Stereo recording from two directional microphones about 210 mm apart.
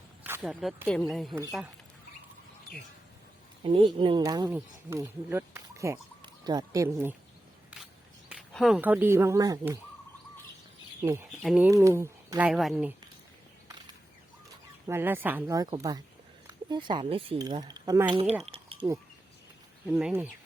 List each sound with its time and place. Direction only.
0.3 s speech: 5° right (ahead or behind)
3.6 s speech: 25° right (ahead or behind)
8.3 s speech: centre (ahead or behind)
11.3 s speech: 5° right (ahead or behind)
14.8 s speech: 10° right (ahead or behind)
18.4 s a sound: 25° right (ahead or behind)
19.9 s speech: 5° right (ahead or behind)